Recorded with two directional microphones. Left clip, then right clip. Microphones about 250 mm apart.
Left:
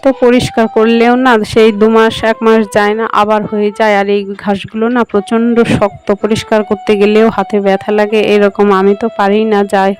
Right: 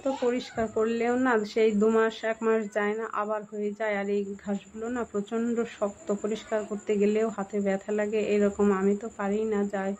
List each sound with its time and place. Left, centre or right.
0.0 s speech: left